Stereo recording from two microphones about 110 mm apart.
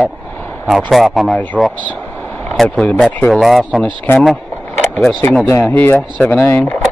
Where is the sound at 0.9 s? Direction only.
Centre (ahead or behind).